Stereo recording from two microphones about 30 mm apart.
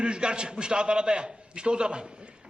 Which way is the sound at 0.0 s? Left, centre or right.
Right.